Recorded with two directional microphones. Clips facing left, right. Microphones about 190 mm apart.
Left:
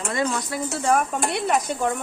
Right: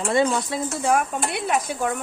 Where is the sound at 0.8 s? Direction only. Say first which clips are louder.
Left 1 dB; 5° right (ahead or behind).